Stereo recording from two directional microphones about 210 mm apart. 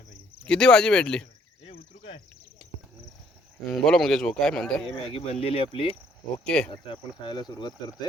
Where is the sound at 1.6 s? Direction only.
30° left (ahead or behind).